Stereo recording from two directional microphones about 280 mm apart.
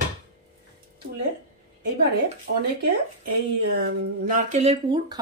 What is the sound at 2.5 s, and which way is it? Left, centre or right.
Speech, right.